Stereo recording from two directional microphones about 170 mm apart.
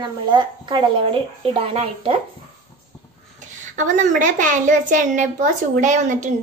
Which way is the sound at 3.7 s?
45° right (ahead or behind).